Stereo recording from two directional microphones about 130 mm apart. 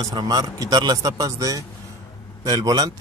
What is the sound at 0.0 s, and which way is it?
Speech, 35° right (ahead or behind).